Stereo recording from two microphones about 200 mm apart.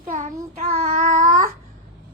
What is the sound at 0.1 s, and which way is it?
Child singing, 40° right (ahead or behind).